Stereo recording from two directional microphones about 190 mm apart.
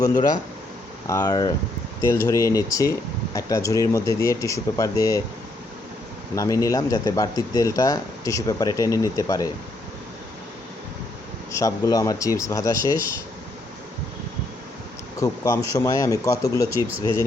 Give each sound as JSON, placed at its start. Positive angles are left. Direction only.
{"t": 0.0, "sound": "speech", "side_deg": 20}
{"t": 6.3, "sound": "speech", "side_deg": 15}
{"t": 11.5, "sound": "speech", "side_deg": 20}
{"t": 15.2, "sound": "speech", "side_deg": 15}